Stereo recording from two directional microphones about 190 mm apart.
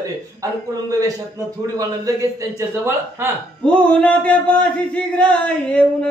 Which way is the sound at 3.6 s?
5° left (ahead or behind).